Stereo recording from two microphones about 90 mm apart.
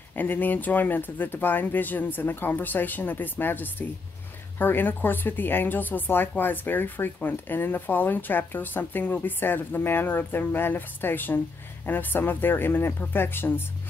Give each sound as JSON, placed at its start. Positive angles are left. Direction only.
{"t": 0.2, "sound": "speech", "side_deg": 20}